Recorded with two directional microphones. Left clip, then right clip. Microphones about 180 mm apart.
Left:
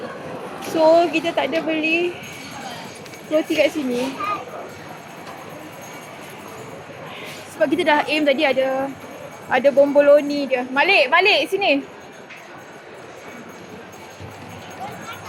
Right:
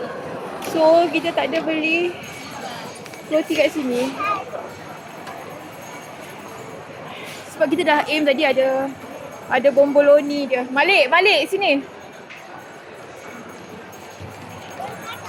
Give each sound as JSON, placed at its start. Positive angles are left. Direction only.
{"t": 0.6, "sound": "speech", "side_deg": -10}
{"t": 3.3, "sound": "a woman's voice", "side_deg": -20}
{"t": 7.6, "sound": "a woman's voice", "side_deg": -25}
{"t": 9.5, "sound": "a woman's voice", "side_deg": -5}